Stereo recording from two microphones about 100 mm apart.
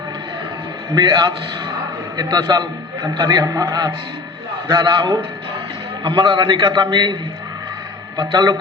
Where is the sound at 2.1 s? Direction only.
50° right (ahead or behind).